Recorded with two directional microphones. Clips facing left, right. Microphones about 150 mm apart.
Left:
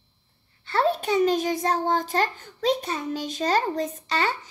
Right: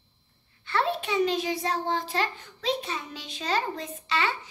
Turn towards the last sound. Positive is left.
turn(degrees=40)  # may be behind; listen again after turning